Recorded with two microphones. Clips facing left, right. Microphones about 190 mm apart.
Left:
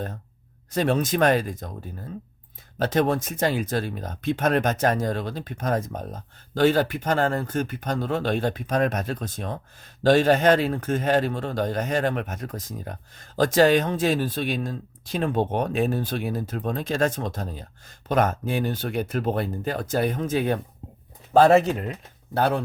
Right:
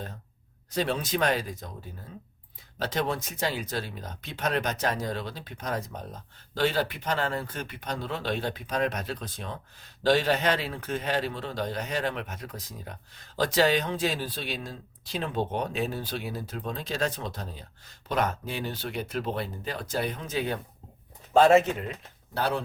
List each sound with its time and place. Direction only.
0.7 s speech: 50° left (ahead or behind)
21.3 s speech: 35° left (ahead or behind)
22.4 s speech: 50° left (ahead or behind)